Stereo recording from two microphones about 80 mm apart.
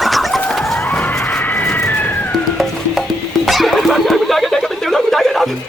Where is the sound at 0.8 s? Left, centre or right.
Left.